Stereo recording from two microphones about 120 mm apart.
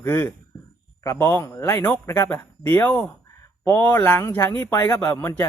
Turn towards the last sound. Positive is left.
turn(degrees=20)  # may be behind; listen again after turning